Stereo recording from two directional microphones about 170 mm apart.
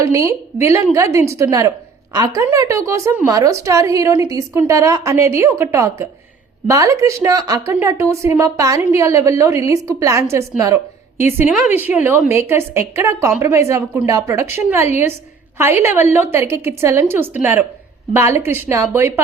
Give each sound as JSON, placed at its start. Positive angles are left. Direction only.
{"t": 0.0, "sound": "a woman's voice", "side_deg": -20}